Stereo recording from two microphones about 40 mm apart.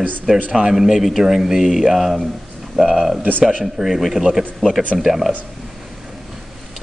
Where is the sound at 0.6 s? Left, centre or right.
Centre.